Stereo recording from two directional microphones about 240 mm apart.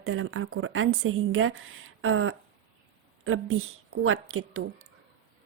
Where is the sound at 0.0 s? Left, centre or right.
Right.